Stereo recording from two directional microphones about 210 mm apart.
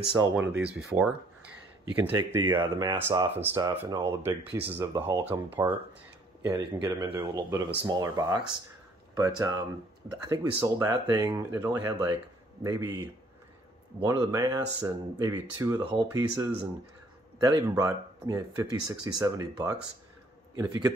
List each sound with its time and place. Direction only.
0.4 s speech: 5° right (ahead or behind)
14.0 s speech: 15° right (ahead or behind)